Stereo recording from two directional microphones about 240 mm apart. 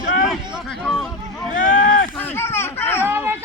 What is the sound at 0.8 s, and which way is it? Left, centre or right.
Speech, centre.